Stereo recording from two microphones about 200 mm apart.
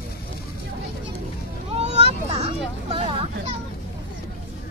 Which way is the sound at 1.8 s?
30° right (ahead or behind).